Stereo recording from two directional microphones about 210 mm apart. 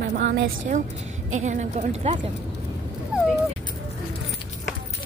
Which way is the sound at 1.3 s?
35° right (ahead or behind).